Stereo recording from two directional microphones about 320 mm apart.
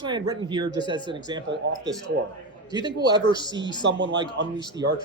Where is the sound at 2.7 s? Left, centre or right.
Centre.